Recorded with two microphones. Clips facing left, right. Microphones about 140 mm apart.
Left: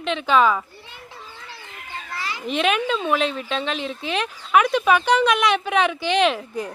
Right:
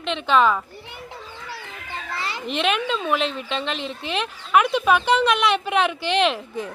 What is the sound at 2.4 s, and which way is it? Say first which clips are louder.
Speech: left 2 dB; centre (ahead or behind).